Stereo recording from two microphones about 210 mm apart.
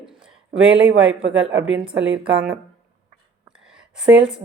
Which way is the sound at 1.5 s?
60° right (ahead or behind).